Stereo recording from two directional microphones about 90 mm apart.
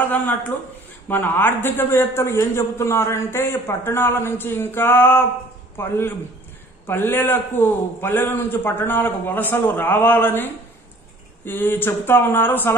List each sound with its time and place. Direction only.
0.1 s a man's voice: 20° left (ahead or behind)